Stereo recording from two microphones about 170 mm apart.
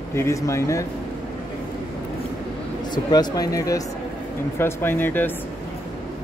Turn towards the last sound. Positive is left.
turn(degrees=10)  # may be behind; listen again after turning